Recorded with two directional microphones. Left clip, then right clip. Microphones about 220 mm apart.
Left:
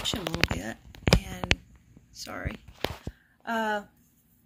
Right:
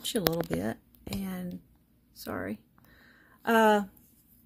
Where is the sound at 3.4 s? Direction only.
50° right (ahead or behind).